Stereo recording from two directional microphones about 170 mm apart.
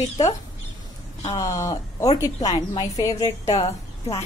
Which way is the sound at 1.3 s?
20° left (ahead or behind).